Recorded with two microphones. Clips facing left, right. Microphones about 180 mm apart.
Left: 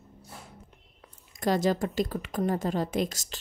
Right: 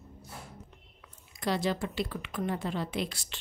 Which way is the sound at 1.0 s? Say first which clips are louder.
Left 6 dB; 45° left (ahead or behind).